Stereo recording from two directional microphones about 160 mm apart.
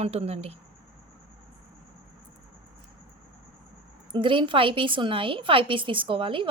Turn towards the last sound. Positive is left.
turn(degrees=-35)  # may be behind; listen again after turning